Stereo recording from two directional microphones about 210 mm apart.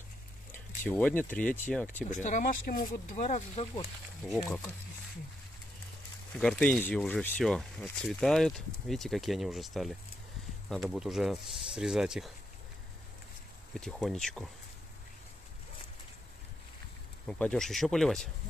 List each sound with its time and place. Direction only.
0.5 s a sound: 10° left (ahead or behind)
1.3 s speech: 5° left (ahead or behind)
2.0 s speech: 35° left (ahead or behind)
4.2 s speech: centre (ahead or behind)
6.3 s speech: 5° left (ahead or behind)
13.7 s speech: centre (ahead or behind)
17.3 s speech: 5° left (ahead or behind)